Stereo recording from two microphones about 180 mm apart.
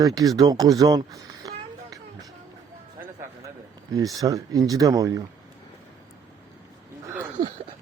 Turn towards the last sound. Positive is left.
turn(degrees=-10)  # may be behind; listen again after turning